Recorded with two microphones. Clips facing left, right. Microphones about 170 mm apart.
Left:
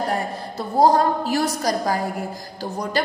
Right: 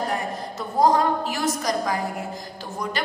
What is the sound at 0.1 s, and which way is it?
A woman's voice, 30° left (ahead or behind).